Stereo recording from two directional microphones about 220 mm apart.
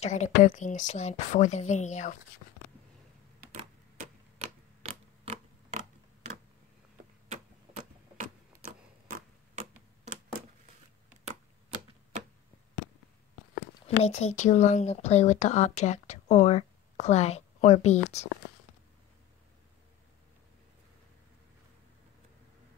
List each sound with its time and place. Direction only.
0.0 s speech: 30° left (ahead or behind)
3.5 s typewriter: 30° right (ahead or behind)
13.8 s speech: 30° left (ahead or behind)